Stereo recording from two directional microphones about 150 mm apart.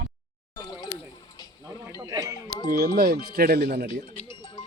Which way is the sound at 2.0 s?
25° right (ahead or behind).